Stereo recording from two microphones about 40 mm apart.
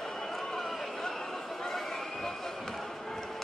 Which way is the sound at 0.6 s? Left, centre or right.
Centre.